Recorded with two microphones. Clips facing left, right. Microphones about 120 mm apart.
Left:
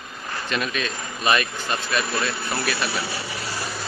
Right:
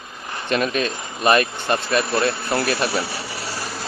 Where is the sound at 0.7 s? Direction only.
40° right (ahead or behind).